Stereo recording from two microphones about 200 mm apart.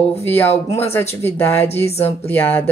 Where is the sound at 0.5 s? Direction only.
30° left (ahead or behind).